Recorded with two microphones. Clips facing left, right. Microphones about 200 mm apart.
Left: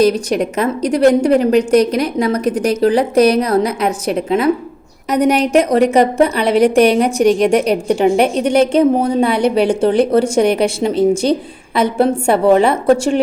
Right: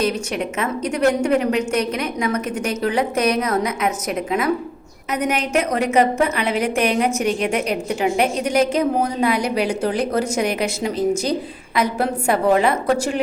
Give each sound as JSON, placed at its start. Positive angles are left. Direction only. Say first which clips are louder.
{"t": 0.0, "sound": "a woman's voice", "louder": "left 8 dB", "side_deg": 35}